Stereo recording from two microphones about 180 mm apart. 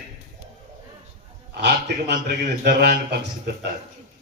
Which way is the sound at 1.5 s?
70° right (ahead or behind).